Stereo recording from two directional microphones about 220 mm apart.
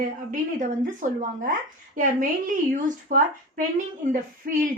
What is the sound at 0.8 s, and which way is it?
Speech, 35° right (ahead or behind).